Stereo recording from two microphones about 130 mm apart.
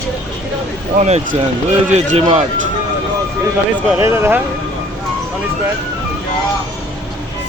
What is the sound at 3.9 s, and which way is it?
Speech, 20° right (ahead or behind).